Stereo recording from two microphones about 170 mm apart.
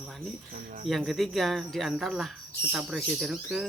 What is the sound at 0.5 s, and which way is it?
Speech, 50° right (ahead or behind).